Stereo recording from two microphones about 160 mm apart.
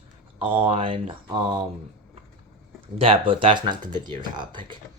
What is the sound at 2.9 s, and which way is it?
Speech, 35° right (ahead or behind).